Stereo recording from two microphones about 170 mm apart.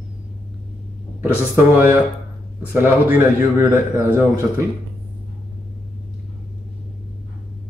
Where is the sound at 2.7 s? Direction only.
10° right (ahead or behind).